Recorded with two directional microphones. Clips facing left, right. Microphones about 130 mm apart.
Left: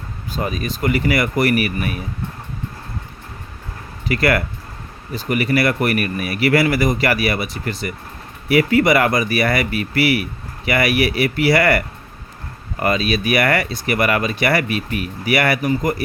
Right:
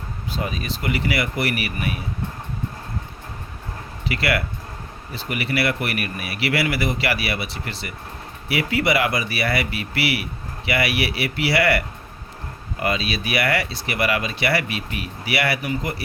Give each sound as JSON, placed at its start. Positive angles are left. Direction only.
{"t": 0.3, "sound": "speech", "side_deg": 45}
{"t": 4.1, "sound": "speech", "side_deg": 45}
{"t": 12.8, "sound": "speech", "side_deg": 45}